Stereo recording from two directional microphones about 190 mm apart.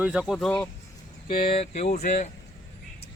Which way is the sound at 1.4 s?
30° left (ahead or behind).